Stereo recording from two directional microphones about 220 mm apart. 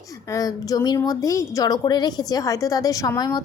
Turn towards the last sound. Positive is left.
turn(degrees=15)  # may be behind; listen again after turning